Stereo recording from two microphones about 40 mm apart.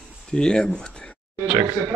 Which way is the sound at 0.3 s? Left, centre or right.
Centre.